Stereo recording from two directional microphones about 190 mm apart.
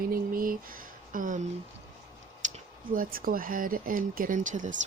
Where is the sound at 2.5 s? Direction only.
45° right (ahead or behind).